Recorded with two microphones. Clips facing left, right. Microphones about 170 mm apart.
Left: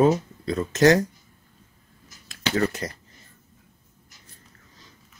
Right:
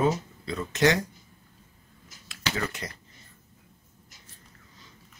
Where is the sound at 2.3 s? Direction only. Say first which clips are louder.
Left 7 dB; 40° left (ahead or behind).